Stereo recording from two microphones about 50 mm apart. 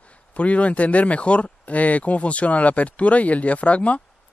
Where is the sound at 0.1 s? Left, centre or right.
Left.